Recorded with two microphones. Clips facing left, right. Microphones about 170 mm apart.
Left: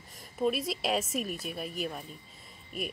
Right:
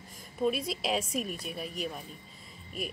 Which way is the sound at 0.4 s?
Centre (ahead or behind).